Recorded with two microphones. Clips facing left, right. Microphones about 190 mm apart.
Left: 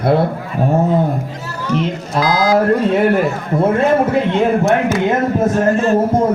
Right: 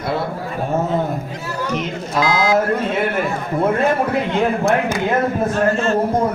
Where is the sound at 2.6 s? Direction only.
35° left (ahead or behind).